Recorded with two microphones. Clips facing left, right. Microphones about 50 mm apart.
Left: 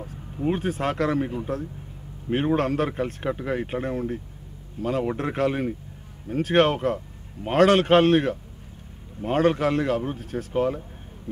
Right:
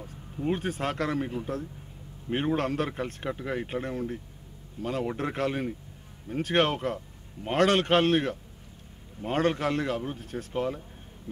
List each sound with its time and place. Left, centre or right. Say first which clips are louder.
0.4 s speech: left 4 dB; centre